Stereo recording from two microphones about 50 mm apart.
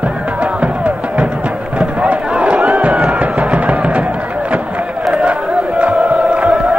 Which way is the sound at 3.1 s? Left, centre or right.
Right.